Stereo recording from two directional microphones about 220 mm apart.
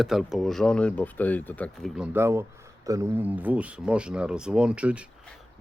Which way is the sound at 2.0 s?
10° right (ahead or behind).